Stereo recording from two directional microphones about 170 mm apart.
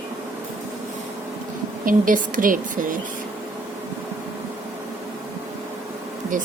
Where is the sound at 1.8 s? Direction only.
55° right (ahead or behind).